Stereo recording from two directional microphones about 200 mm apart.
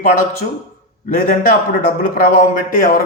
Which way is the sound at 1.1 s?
45° left (ahead or behind).